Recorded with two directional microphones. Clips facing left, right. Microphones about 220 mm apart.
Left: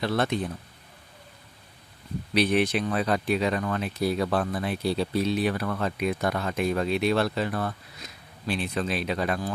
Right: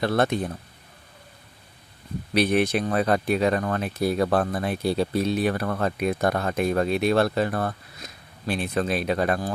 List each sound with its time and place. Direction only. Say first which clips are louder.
0.0 s speech: right 3 dB; 50° right (ahead or behind)
2.3 s speech: right 2 dB; 50° right (ahead or behind)